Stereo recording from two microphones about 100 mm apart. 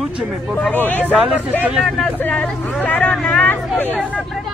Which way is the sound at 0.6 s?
20° left (ahead or behind).